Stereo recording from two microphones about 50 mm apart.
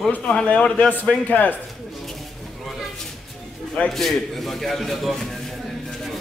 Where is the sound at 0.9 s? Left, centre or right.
Left.